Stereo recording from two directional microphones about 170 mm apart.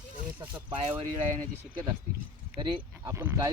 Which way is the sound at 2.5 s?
20° right (ahead or behind).